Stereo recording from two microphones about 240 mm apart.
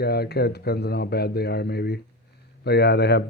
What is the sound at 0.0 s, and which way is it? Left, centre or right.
Speech, left.